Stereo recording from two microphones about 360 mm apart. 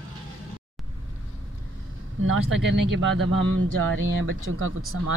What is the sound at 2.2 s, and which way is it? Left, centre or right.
Speech, right.